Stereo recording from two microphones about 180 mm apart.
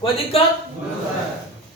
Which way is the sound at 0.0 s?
35° left (ahead or behind).